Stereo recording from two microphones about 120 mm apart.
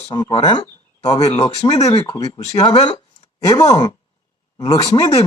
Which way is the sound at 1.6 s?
30° left (ahead or behind).